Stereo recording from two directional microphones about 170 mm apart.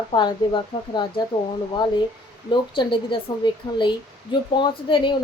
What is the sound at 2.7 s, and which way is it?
Speech, 30° left (ahead or behind).